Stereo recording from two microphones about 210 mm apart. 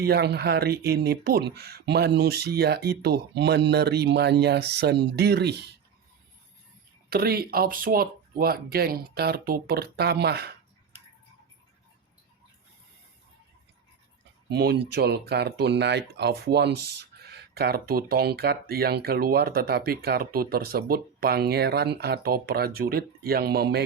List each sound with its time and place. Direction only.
0.0 s speech: 50° right (ahead or behind)
7.1 s speech: 45° right (ahead or behind)
14.5 s speech: 50° right (ahead or behind)